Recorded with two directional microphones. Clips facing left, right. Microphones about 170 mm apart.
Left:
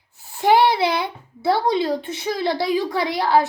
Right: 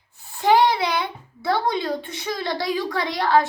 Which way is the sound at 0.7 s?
30° left (ahead or behind).